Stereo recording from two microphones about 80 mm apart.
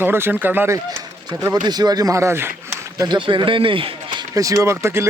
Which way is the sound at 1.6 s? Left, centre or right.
Right.